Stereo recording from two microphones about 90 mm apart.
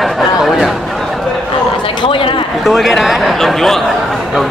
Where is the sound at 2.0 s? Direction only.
80° left.